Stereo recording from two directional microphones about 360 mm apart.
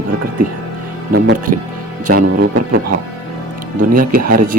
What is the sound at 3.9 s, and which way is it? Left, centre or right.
Speech, right.